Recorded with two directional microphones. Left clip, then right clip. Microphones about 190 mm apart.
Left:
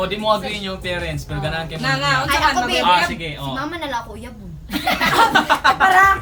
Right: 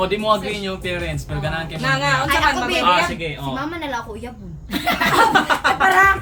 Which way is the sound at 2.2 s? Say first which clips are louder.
Left 1 dB; 20° left (ahead or behind).